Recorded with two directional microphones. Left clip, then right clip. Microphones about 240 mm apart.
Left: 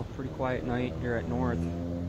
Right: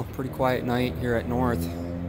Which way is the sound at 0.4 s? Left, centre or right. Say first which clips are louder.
Right 7 dB; right.